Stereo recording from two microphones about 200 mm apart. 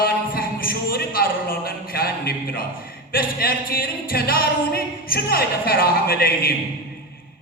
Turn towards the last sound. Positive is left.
turn(degrees=50)  # may be behind; listen again after turning